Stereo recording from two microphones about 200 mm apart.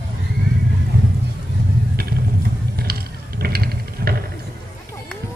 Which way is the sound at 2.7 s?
50° right (ahead or behind).